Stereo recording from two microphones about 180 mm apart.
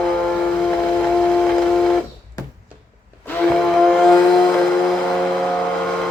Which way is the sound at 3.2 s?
5° left (ahead or behind).